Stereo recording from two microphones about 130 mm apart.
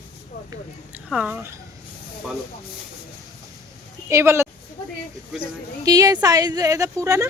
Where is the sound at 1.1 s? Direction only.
10° right (ahead or behind).